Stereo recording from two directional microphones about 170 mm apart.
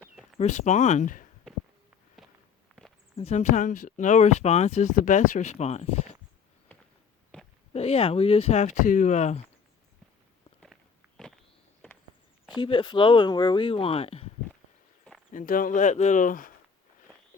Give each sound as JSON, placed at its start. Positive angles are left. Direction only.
{"t": 0.3, "sound": "speech", "side_deg": 40}
{"t": 3.2, "sound": "speech", "side_deg": 40}
{"t": 7.3, "sound": "a sound", "side_deg": 5}
{"t": 7.7, "sound": "speech", "side_deg": 35}
{"t": 11.2, "sound": "walk", "side_deg": 5}
{"t": 12.5, "sound": "speech", "side_deg": 25}
{"t": 15.3, "sound": "speech", "side_deg": 50}